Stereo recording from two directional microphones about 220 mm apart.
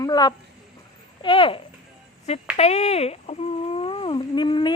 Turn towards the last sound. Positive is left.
turn(degrees=20)  # may be behind; listen again after turning